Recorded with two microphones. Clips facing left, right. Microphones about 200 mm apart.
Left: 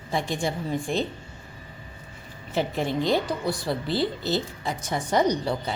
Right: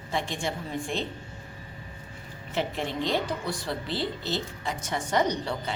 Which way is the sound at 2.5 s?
40° left (ahead or behind).